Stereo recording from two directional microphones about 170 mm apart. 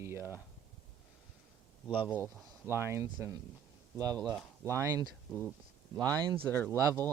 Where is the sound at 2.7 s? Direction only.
15° right (ahead or behind).